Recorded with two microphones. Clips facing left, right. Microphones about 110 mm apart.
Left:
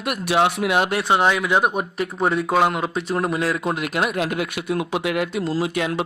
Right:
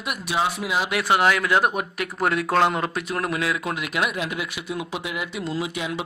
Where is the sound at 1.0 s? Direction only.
20° left (ahead or behind).